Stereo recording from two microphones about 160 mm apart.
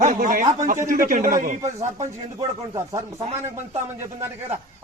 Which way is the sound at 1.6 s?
20° right (ahead or behind).